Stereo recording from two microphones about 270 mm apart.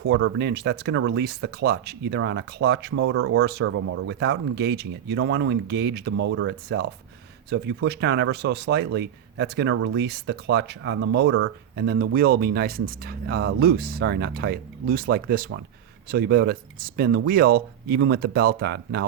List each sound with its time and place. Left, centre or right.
0.0 s speech: right